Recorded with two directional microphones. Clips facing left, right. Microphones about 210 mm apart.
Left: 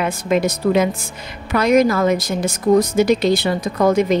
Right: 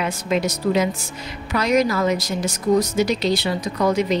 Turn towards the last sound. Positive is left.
turn(degrees=50)  # may be behind; listen again after turning